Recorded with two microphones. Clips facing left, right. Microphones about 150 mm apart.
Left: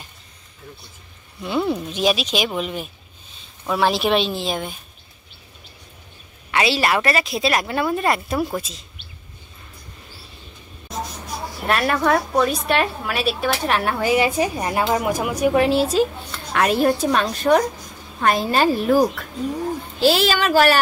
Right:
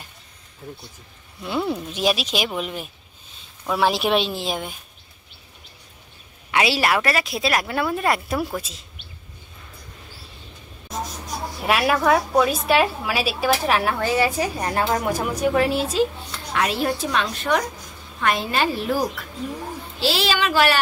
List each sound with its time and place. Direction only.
1.4 s a woman's voice: centre (ahead or behind)
6.5 s a woman's voice: 10° right (ahead or behind)
11.6 s a woman's voice: 5° right (ahead or behind)
14.0 s a woman's voice: 15° left (ahead or behind)
16.5 s a woman's voice: 50° left (ahead or behind)